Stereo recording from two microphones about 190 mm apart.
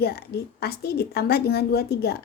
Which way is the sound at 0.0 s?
55° left (ahead or behind).